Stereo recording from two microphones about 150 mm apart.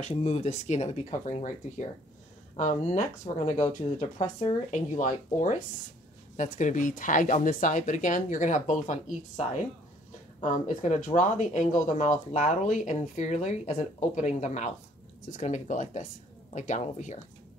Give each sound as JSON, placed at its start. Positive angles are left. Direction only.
{"t": 0.1, "sound": "speech", "side_deg": 45}
{"t": 10.4, "sound": "speech", "side_deg": 55}